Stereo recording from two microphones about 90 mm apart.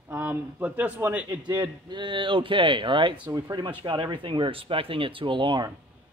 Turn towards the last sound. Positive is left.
turn(degrees=-70)  # may be behind; listen again after turning